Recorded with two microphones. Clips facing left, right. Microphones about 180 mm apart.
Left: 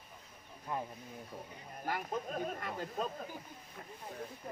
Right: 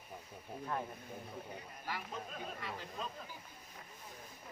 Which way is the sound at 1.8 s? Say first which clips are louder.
Left 7 dB; 50° left (ahead or behind).